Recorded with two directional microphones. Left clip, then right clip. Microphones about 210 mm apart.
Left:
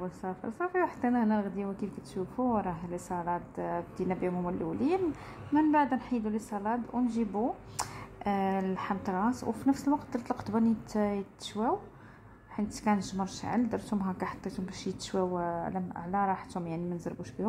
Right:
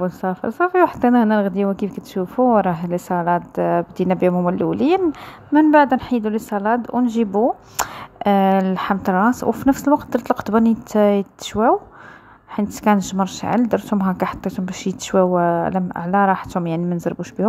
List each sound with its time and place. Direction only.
0.0 s a woman's voice: 40° right (ahead or behind)